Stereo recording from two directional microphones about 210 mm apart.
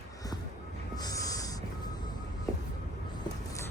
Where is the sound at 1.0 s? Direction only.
15° left (ahead or behind).